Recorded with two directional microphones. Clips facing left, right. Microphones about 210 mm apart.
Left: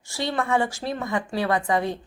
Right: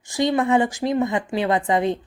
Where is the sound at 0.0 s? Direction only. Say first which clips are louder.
Right 7 dB; 15° right (ahead or behind).